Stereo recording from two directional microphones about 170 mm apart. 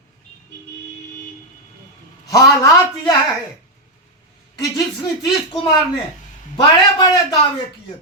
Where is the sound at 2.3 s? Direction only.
20° left (ahead or behind).